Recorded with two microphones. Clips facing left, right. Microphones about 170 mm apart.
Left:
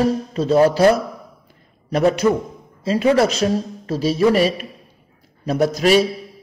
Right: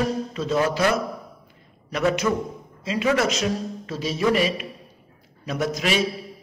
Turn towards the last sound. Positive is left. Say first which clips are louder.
# left 8 dB
turn(degrees=35)  # may be behind; listen again after turning